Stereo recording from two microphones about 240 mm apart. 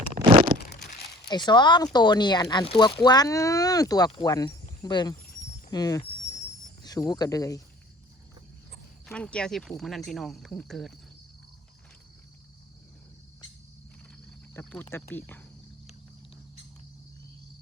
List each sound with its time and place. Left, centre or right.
0.2 s a sound: right
1.3 s speech: centre
5.7 s a sound: centre
6.8 s speech: centre
9.0 s speech: centre
14.5 s speech: centre